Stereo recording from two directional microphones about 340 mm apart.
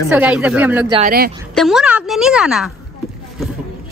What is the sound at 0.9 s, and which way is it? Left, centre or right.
Speech, right.